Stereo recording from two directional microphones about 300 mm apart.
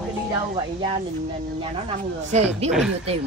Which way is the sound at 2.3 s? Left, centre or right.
Right.